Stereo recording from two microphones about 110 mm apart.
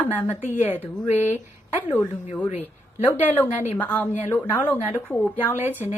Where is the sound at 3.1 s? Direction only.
20° left (ahead or behind).